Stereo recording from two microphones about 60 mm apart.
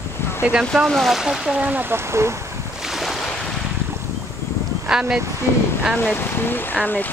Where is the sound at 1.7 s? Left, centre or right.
Right.